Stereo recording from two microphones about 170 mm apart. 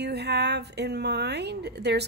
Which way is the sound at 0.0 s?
75° right (ahead or behind).